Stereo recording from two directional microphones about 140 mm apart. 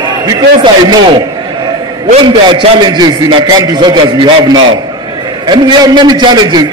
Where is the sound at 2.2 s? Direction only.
35° right (ahead or behind).